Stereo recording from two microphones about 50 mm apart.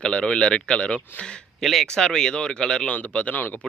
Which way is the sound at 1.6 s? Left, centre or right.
Centre.